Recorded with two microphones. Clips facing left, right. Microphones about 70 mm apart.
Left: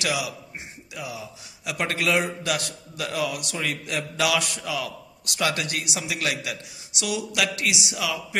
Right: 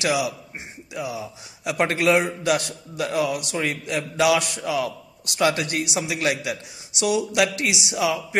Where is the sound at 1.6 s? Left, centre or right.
Right.